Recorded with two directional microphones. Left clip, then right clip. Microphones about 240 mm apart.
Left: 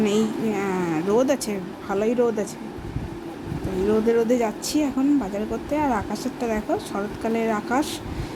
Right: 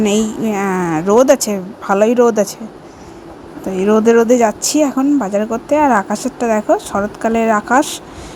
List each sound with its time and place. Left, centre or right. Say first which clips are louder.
0.0 s speech: right 6 dB; right
3.8 s speech: right 10 dB; right